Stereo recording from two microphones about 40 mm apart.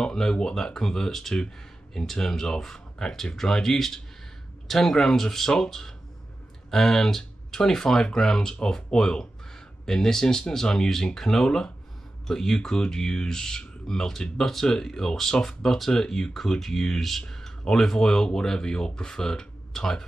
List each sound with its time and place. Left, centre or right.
0.0 s speech: centre